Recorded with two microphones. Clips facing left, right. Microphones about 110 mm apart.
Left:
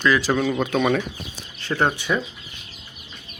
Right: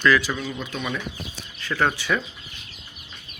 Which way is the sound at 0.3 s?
65° left (ahead or behind).